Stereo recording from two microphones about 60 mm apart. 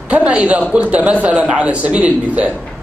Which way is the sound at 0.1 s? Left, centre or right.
Centre.